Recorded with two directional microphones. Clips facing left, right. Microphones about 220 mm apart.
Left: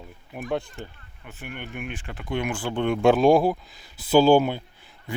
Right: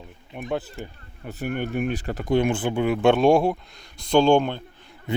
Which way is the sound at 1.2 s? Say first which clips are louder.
Right 10 dB; 40° right (ahead or behind).